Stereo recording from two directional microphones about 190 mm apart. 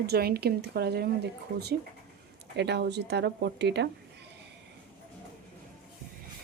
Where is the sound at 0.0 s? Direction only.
55° right (ahead or behind).